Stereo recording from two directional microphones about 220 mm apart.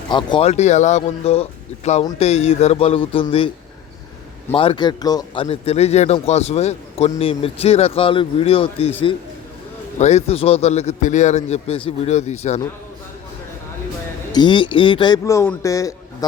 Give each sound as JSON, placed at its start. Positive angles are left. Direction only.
{"t": 0.1, "sound": "a man's voice", "side_deg": 20}
{"t": 4.5, "sound": "a man's voice", "side_deg": 25}
{"t": 14.3, "sound": "a man's voice", "side_deg": 20}